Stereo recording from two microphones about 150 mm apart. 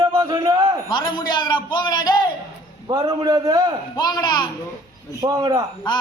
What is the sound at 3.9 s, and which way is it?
Speech, 30° left (ahead or behind).